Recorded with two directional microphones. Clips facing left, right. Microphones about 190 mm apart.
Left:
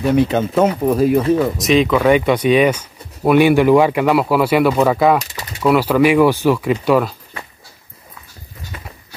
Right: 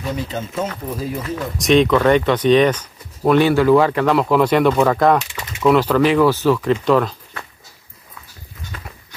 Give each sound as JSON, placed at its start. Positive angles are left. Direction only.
{"t": 0.0, "sound": "speech", "side_deg": 65}
{"t": 1.6, "sound": "speech", "side_deg": 0}
{"t": 5.2, "sound": "a sound", "side_deg": 40}
{"t": 5.6, "sound": "speech", "side_deg": 5}
{"t": 8.7, "sound": "horse", "side_deg": 10}